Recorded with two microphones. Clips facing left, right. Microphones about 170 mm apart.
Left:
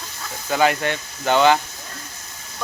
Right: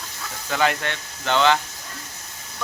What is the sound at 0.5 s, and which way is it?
Speech, 5° left (ahead or behind).